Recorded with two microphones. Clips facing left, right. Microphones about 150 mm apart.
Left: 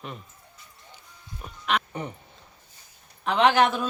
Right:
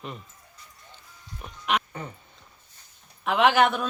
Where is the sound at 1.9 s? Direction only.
20° left (ahead or behind).